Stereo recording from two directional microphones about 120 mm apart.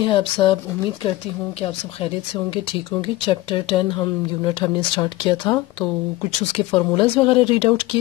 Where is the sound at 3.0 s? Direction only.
45° left (ahead or behind).